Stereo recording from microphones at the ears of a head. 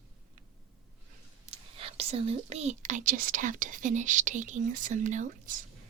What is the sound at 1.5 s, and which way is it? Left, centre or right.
Speech, right.